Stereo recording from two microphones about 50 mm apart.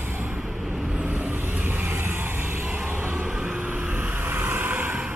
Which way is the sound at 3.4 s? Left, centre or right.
Right.